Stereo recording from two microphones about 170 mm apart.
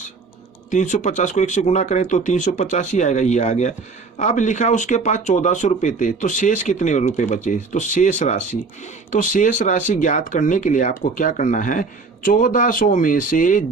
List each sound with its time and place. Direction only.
0.7 s speech: 45° left (ahead or behind)